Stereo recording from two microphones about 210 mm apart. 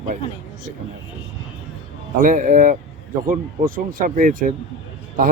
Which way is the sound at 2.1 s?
40° right (ahead or behind).